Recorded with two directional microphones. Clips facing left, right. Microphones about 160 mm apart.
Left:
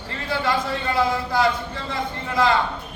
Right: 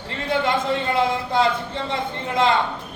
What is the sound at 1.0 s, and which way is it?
A man's voice, 25° right (ahead or behind).